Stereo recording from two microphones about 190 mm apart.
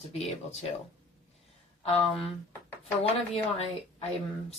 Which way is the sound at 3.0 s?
30° left (ahead or behind).